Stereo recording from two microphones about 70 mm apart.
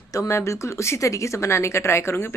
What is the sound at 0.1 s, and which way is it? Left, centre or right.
Speech, left.